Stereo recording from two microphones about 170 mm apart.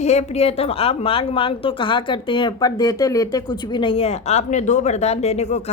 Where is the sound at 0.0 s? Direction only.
40° left (ahead or behind).